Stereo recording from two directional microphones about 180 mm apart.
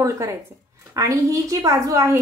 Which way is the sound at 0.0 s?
15° right (ahead or behind).